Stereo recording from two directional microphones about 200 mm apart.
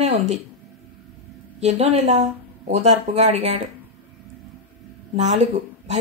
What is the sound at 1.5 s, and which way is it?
Speech, 30° right (ahead or behind).